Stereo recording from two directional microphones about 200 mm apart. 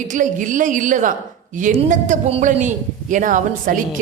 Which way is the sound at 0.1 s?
40° right (ahead or behind).